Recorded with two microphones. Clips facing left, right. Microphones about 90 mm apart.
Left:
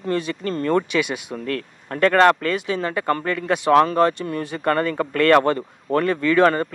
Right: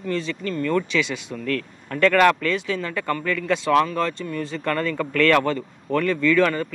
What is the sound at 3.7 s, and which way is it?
Speech, 50° left (ahead or behind).